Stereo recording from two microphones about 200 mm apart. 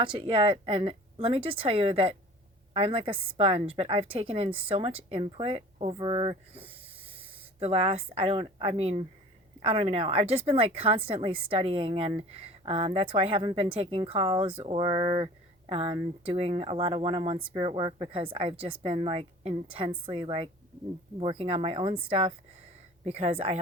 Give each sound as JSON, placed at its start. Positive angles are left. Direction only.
{"t": 0.0, "sound": "speech", "side_deg": -25}